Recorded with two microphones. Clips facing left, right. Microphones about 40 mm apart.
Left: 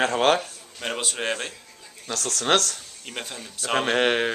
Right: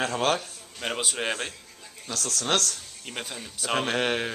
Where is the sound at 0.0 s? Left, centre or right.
Centre.